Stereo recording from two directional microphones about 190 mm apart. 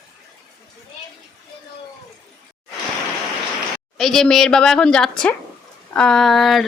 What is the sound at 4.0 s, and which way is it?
A woman's voice, centre (ahead or behind).